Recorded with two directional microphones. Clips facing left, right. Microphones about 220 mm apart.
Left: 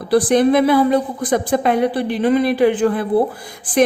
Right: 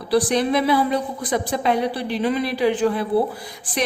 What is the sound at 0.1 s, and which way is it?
A woman's voice, 50° left (ahead or behind).